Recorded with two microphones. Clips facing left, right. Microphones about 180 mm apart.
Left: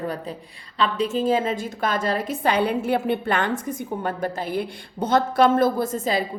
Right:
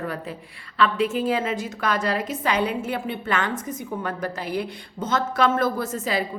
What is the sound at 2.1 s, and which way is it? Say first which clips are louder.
A woman's voice: left 2 dB; 55° left (ahead or behind).